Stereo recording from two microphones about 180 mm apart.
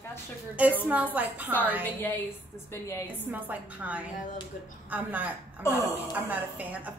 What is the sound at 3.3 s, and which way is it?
A woman's voice, 10° right (ahead or behind).